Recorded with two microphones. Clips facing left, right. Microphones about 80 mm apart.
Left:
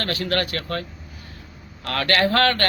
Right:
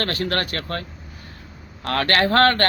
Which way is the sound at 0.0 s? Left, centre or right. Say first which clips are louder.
Even; right.